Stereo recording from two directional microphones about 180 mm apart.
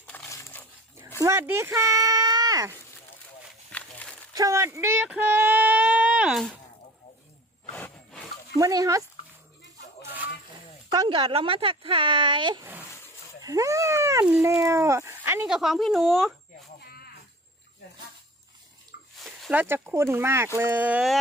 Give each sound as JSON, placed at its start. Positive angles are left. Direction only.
{"t": 0.3, "sound": "dog", "side_deg": 15}
{"t": 1.2, "sound": "speech", "side_deg": -15}
{"t": 3.7, "sound": "a sound", "side_deg": 5}
{"t": 4.4, "sound": "speech", "side_deg": -15}
{"t": 7.7, "sound": "a sound", "side_deg": 5}
{"t": 8.5, "sound": "speech", "side_deg": -20}
{"t": 10.9, "sound": "speech", "side_deg": -25}
{"t": 19.2, "sound": "speech", "side_deg": -5}